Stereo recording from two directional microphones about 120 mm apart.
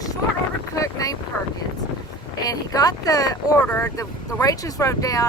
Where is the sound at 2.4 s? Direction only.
30° left (ahead or behind).